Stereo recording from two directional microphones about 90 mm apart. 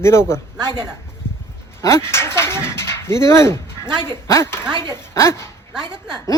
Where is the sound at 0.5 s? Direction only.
50° right (ahead or behind).